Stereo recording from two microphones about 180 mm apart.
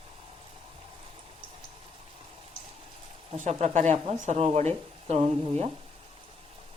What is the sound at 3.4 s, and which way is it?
Speech, 40° right (ahead or behind).